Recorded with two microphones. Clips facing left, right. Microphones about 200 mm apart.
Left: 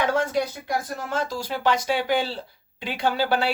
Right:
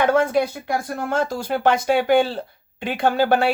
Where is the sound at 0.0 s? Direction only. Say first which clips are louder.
Right 5 dB; 55° right (ahead or behind).